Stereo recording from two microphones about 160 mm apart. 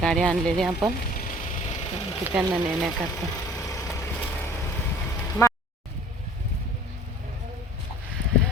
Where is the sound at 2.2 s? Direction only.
10° right (ahead or behind).